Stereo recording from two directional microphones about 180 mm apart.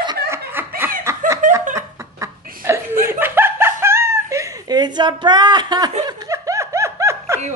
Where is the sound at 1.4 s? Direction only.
45° right (ahead or behind).